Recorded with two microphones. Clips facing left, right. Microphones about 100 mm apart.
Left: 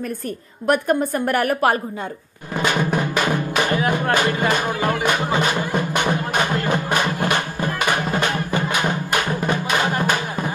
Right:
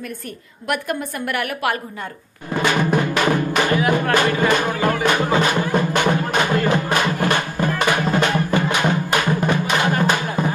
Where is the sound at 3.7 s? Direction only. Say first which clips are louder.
Right 2 dB; 25° left (ahead or behind).